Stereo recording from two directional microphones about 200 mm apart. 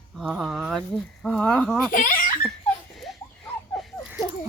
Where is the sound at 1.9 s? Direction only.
40° left (ahead or behind).